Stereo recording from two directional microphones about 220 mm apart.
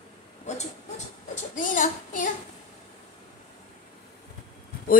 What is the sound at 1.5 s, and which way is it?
Speech, 35° left (ahead or behind).